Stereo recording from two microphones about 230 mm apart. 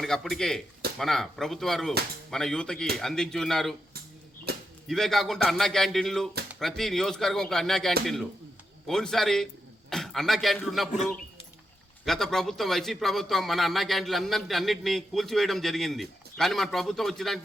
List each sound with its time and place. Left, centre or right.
0.0 s a man's voice: centre
4.5 s a sound: right
4.9 s a man's voice: centre
12.0 s a man's voice: centre